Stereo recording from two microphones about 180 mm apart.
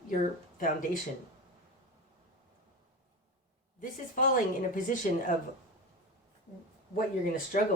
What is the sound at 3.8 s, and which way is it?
Speech, 50° left (ahead or behind).